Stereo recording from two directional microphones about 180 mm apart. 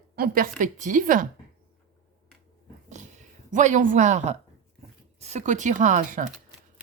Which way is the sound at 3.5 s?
45° right (ahead or behind).